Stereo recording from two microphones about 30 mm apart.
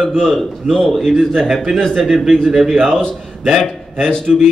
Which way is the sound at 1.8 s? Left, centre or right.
Centre.